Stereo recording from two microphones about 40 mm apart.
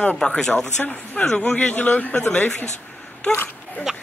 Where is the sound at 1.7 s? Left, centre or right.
Left.